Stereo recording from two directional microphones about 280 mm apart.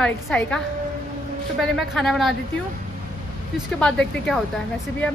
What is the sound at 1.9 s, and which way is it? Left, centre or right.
Speech, centre.